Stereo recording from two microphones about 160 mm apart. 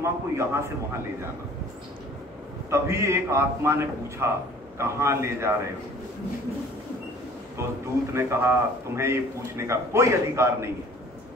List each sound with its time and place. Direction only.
0.0 s a man's voice: 15° right (ahead or behind)
2.7 s a man's voice: 15° right (ahead or behind)
7.6 s a man's voice: 15° right (ahead or behind)